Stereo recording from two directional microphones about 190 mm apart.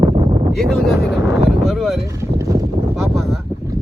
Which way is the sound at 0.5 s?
Centre (ahead or behind).